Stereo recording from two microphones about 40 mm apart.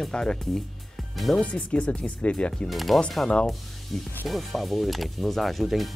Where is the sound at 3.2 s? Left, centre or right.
Centre.